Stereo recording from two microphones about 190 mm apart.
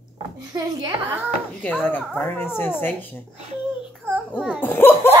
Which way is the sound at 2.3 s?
10° left (ahead or behind).